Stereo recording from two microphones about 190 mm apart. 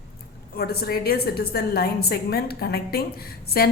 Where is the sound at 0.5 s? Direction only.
55° left (ahead or behind).